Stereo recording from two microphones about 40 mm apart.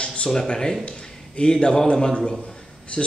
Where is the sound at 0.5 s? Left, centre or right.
Centre.